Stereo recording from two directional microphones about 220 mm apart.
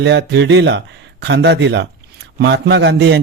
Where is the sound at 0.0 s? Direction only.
50° right (ahead or behind).